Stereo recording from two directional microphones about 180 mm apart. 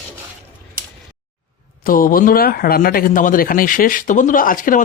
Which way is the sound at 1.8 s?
50° left (ahead or behind).